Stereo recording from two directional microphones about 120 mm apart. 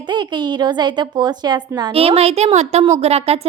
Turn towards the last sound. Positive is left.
turn(degrees=-60)  # may be behind; listen again after turning